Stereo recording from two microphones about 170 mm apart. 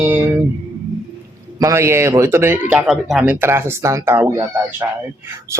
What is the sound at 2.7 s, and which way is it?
Speech, centre (ahead or behind).